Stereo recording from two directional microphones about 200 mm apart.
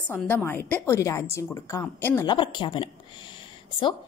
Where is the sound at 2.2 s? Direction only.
25° left (ahead or behind).